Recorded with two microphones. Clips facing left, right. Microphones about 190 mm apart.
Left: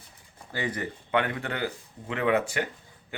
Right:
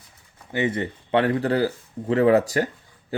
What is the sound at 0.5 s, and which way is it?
Speech, 25° right (ahead or behind).